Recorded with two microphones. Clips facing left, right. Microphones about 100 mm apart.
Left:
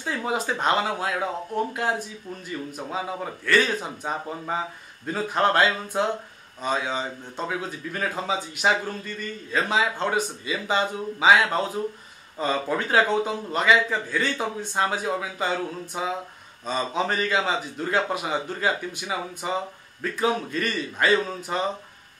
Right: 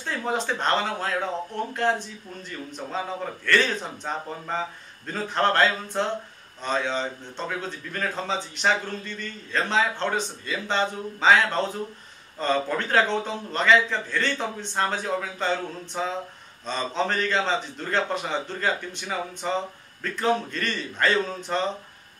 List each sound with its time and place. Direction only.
0.0 s a man's voice: 5° left (ahead or behind)